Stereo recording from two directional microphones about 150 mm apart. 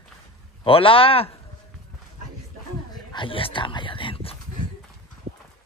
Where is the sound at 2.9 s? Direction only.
30° left (ahead or behind).